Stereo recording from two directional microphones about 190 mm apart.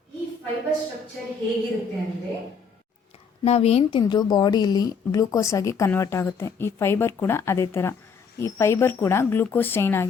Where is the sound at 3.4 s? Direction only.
30° left (ahead or behind).